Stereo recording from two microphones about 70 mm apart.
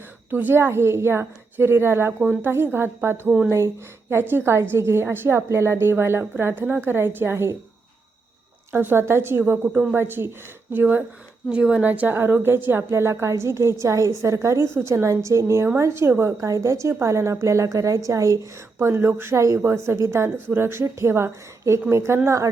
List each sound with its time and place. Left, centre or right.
0.3 s a woman's voice: right
8.7 s a woman's voice: right
11.4 s a woman's voice: centre; by 16.3 s right
16.4 s a woman's voice: right
18.8 s a woman's voice: right